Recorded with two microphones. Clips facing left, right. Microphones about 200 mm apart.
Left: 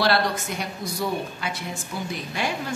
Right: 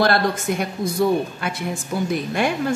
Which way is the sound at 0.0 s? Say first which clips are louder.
Right 4 dB; 50° right (ahead or behind).